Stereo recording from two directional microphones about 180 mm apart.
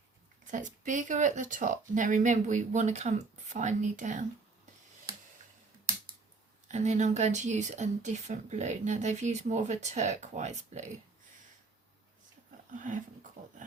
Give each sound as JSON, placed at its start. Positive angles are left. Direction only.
{"t": 0.4, "sound": "speech", "side_deg": -45}
{"t": 6.7, "sound": "speech", "side_deg": -40}
{"t": 12.7, "sound": "speech", "side_deg": -45}
{"t": 13.4, "sound": "dog", "side_deg": -45}